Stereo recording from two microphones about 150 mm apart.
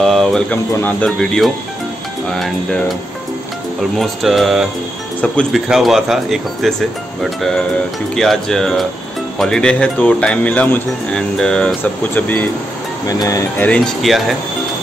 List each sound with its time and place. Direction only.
0.0 s speech: 5° left (ahead or behind)
4.0 s speech: centre (ahead or behind)
13.0 s speech: 25° left (ahead or behind)
13.6 s speech: 5° left (ahead or behind)